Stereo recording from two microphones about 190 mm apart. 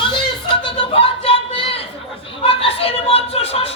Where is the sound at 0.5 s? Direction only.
30° left (ahead or behind).